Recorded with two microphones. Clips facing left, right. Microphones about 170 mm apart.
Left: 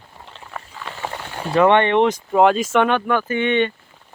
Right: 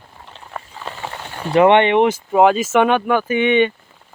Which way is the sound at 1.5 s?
15° right (ahead or behind).